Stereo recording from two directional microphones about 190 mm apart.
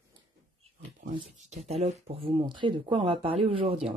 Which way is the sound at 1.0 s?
40° right (ahead or behind).